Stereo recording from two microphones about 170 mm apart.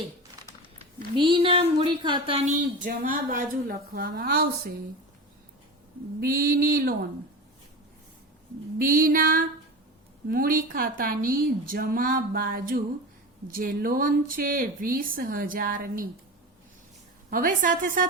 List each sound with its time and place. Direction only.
1.1 s speech: 30° right (ahead or behind)
2.6 s a woman's voice: 50° right (ahead or behind)
6.2 s a woman's voice: 60° right (ahead or behind)
8.8 s a woman's voice: 55° right (ahead or behind)
17.2 s a woman's voice: 55° right (ahead or behind)